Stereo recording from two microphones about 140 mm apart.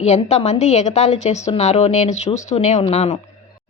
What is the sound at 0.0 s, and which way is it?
A woman's voice, 50° left (ahead or behind).